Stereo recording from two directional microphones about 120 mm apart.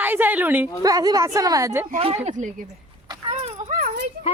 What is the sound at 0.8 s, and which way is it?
A woman's voice, 30° right (ahead or behind).